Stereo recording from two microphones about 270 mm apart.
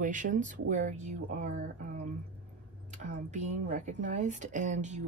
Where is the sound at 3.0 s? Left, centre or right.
Right.